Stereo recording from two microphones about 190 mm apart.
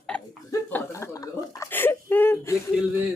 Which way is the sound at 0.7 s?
10° left (ahead or behind).